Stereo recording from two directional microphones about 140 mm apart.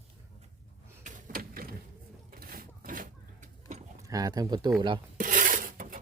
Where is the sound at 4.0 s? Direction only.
25° right (ahead or behind).